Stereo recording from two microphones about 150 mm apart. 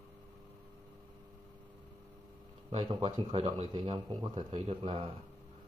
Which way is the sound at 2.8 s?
30° right (ahead or behind).